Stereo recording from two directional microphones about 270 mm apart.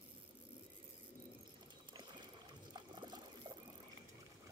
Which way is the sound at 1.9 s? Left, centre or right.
Centre.